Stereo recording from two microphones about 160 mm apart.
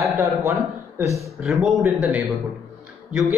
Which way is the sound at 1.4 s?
Centre (ahead or behind).